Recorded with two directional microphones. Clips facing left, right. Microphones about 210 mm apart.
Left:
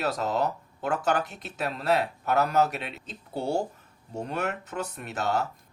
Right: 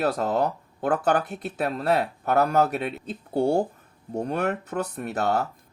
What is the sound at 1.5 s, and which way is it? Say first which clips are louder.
Speech: right 5 dB; 55° right (ahead or behind).